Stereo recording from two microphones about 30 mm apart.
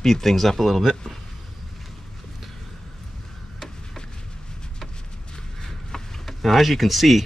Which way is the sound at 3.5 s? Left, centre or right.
Centre.